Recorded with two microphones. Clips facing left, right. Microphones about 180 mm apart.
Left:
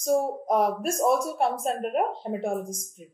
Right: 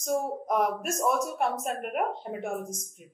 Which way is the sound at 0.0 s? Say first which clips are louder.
Left 5 dB; 35° left (ahead or behind).